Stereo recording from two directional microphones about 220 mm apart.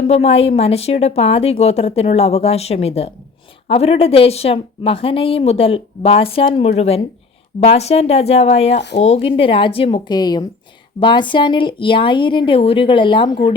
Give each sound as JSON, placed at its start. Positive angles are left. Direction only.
{"t": 0.1, "sound": "a woman's voice", "side_deg": 25}